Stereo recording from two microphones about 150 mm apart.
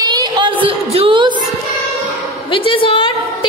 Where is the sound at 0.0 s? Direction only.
30° right (ahead or behind).